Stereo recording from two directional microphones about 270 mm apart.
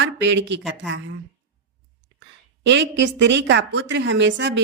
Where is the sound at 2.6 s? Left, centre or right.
Right.